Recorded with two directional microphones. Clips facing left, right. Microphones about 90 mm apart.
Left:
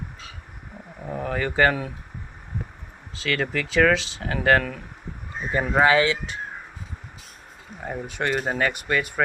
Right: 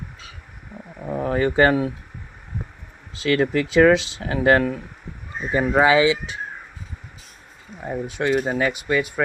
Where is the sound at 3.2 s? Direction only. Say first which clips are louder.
Right 6 dB; 25° right (ahead or behind).